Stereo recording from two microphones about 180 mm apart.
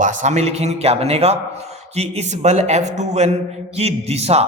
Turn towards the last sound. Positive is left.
turn(degrees=-35)  # may be behind; listen again after turning